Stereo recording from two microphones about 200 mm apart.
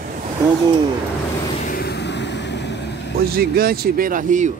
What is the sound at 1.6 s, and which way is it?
Vehicle, 50° left (ahead or behind).